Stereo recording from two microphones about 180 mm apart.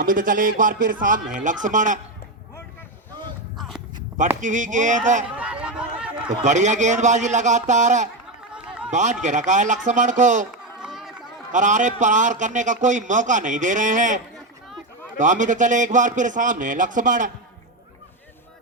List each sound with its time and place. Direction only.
0.0 s a man's voice: 50° right (ahead or behind)
4.4 s a man's voice: 45° right (ahead or behind)
5.4 s a sound: 5° right (ahead or behind)
6.4 s speech: 40° right (ahead or behind)
8.5 s a sound: 5° right (ahead or behind)
8.9 s a man's voice: 40° right (ahead or behind)
10.8 s run: centre (ahead or behind)
11.5 s a man's voice: 45° right (ahead or behind)
15.2 s a man's voice: 45° right (ahead or behind)